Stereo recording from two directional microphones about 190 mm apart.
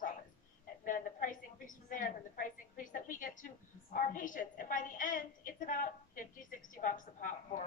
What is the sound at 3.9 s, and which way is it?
A woman's voice, 45° left (ahead or behind).